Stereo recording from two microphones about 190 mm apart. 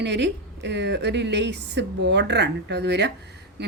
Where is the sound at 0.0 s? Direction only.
65° right (ahead or behind).